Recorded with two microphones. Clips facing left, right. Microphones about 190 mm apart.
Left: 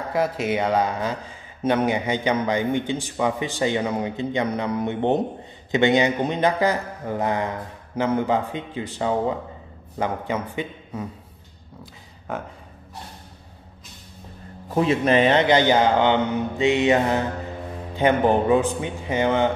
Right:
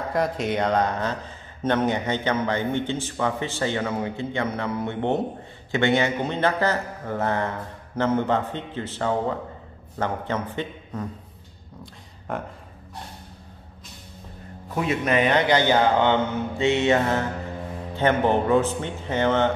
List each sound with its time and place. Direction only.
0.1 s a man's voice: 5° left (ahead or behind)
14.8 s a man's voice: 30° left (ahead or behind); by 19.5 s 10° left (ahead or behind)